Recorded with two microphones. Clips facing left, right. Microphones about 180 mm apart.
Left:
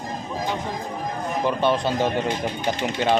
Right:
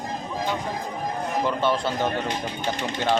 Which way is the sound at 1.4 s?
20° left (ahead or behind).